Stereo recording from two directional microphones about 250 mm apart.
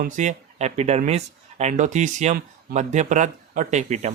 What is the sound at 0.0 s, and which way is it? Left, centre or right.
Speech, right.